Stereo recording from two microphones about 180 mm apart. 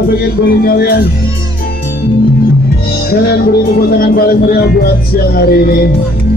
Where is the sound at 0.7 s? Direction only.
60° left (ahead or behind).